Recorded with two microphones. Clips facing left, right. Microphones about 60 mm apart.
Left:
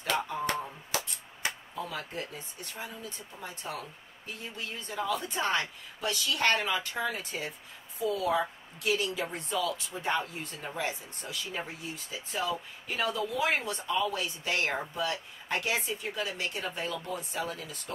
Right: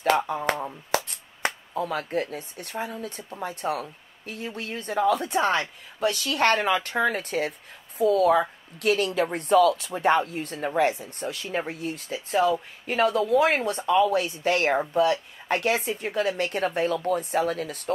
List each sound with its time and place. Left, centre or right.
0.0 s a woman's voice: right